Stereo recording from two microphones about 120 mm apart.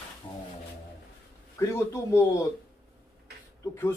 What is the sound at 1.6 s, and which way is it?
Speech, 25° left (ahead or behind).